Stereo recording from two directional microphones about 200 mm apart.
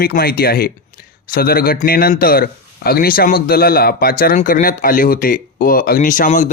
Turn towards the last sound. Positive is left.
turn(degrees=40)  # may be behind; listen again after turning